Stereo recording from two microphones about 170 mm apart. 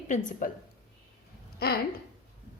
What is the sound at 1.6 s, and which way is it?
Speech, 65° left (ahead or behind).